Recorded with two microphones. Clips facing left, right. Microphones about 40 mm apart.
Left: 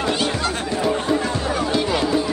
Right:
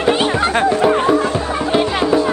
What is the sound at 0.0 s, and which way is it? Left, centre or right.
Music, right.